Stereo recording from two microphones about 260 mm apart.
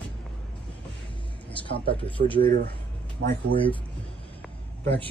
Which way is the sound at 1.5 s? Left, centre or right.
Centre.